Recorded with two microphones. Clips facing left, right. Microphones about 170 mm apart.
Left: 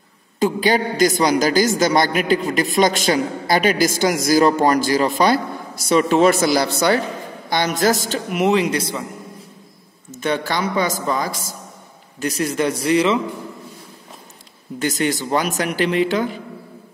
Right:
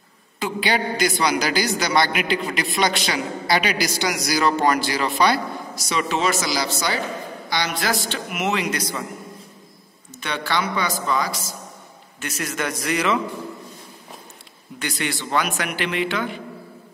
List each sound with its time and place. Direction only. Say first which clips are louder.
0.4 s a woman's voice: left 6 dB; 45° left (ahead or behind)
10.2 s a woman's voice: left 4 dB; 45° left (ahead or behind)
12.2 s a man's voice: left 7 dB; 35° left (ahead or behind)
14.8 s a man's voice: left 7 dB; 40° left (ahead or behind)